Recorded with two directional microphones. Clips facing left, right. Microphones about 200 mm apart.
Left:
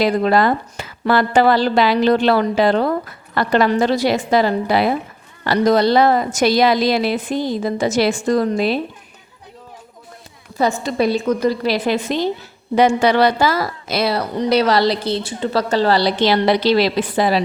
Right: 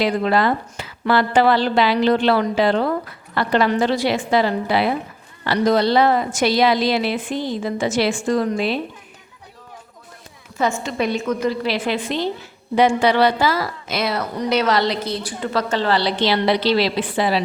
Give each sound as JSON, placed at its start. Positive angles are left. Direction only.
{"t": 0.0, "sound": "a woman's voice", "side_deg": 40}
{"t": 10.6, "sound": "a woman's voice", "side_deg": 35}